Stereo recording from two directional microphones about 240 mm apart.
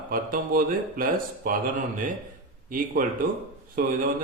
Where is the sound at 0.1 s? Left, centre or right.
Right.